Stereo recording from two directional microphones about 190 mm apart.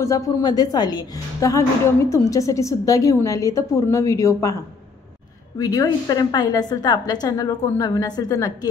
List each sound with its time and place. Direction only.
0.0 s a woman's voice: 20° left (ahead or behind)
5.6 s a woman's voice: 20° left (ahead or behind)